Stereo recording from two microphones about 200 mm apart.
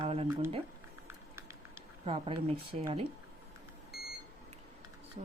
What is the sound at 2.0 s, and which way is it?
Speech, 30° right (ahead or behind).